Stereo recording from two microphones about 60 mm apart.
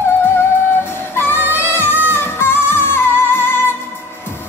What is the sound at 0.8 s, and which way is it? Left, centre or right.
Music, left.